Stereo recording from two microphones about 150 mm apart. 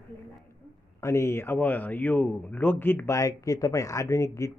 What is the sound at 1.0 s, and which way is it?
A man's voice, 20° left (ahead or behind).